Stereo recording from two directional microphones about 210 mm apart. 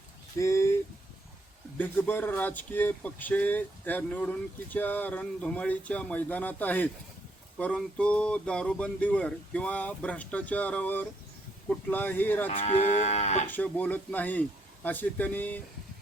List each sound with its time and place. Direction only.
0.3 s speech: 15° left (ahead or behind)
1.8 s speech: 10° left (ahead or behind)
12.5 s moo: 30° left (ahead or behind)
13.5 s speech: 10° left (ahead or behind)